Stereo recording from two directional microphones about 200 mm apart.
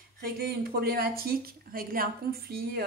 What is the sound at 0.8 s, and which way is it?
Speech, 50° right (ahead or behind).